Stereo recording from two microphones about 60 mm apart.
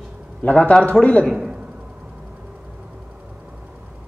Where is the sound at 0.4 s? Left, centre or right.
Left.